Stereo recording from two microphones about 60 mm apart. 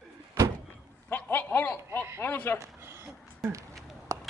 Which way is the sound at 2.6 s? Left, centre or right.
Right.